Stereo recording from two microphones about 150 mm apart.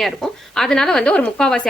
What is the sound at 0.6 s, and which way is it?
Speech, 5° left (ahead or behind).